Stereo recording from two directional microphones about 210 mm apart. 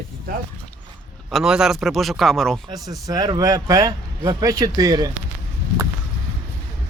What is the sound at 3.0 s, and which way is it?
Speech, 15° right (ahead or behind).